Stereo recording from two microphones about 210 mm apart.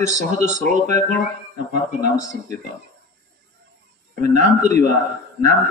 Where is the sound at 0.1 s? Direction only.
35° right (ahead or behind).